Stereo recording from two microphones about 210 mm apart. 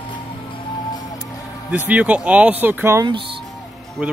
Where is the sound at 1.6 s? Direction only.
10° right (ahead or behind).